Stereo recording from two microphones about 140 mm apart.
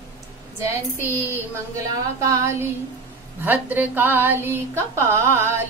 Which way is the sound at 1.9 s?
20° right (ahead or behind).